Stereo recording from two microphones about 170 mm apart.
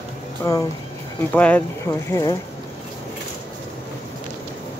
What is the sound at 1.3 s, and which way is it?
Speech, 10° left (ahead or behind).